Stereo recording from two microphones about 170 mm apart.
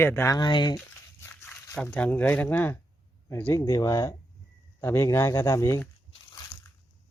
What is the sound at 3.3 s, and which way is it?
Speech, 15° left (ahead or behind).